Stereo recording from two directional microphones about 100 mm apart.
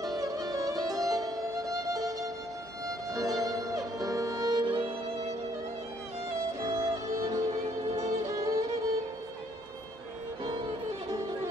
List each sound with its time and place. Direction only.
0.0 s music: 35° right (ahead or behind)
2.9 s violin: 35° right (ahead or behind); by 5.3 s 85° right
6.6 s music: 40° right (ahead or behind)